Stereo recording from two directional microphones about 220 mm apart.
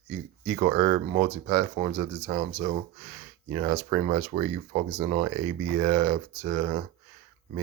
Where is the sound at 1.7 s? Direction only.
35° right (ahead or behind).